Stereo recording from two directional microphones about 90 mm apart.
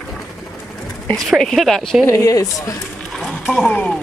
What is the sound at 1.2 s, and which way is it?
Speech, 5° left (ahead or behind).